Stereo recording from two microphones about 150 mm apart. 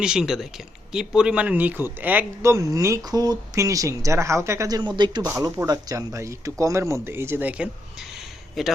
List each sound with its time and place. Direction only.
0.0 s speech: 5° right (ahead or behind)
4.9 s speech: 30° right (ahead or behind)
5.2 s speech: 20° right (ahead or behind); by 8.7 s centre (ahead or behind)